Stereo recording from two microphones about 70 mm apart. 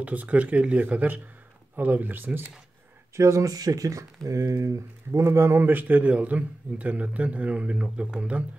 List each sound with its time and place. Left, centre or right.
0.0 s a man's voice: right
3.2 s speech: right
5.7 s a man's voice: right